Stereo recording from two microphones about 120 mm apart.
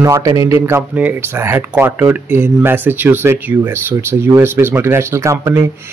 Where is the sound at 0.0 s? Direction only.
30° right (ahead or behind).